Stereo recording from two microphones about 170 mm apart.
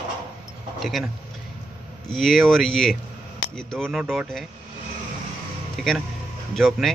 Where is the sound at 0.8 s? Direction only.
Centre (ahead or behind).